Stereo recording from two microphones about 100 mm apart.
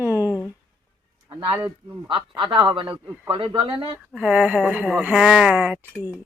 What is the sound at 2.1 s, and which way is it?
A man's voice, 55° right (ahead or behind).